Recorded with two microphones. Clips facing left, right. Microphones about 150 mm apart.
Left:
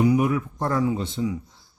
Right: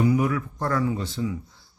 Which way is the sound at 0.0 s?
20° left (ahead or behind).